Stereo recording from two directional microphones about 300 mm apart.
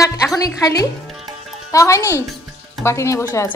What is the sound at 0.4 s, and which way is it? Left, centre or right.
A woman's voice, centre.